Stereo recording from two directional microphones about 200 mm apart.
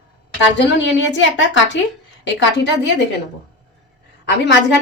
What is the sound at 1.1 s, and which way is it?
Speech, 65° left (ahead or behind).